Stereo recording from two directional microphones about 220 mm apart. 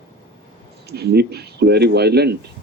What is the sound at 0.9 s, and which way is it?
Speech, 45° right (ahead or behind).